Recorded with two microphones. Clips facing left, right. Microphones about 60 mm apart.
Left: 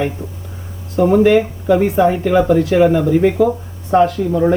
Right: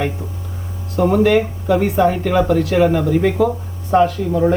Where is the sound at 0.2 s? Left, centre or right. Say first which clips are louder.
Left 1 dB; left.